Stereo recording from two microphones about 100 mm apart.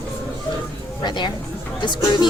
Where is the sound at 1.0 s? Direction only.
45° left (ahead or behind).